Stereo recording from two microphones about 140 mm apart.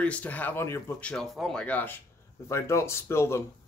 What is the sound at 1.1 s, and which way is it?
Speech, 5° left (ahead or behind).